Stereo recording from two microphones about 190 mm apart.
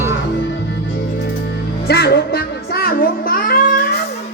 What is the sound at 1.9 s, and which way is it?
Child singing, 60° left (ahead or behind).